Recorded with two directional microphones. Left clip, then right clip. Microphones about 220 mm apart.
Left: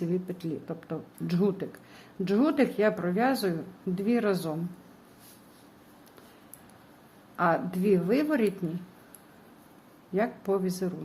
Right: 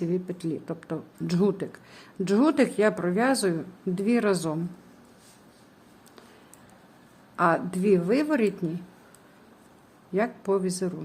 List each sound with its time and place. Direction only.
0.0 s speech: 15° right (ahead or behind)
7.3 s a woman's voice: 20° right (ahead or behind)
10.2 s a woman's voice: 15° right (ahead or behind)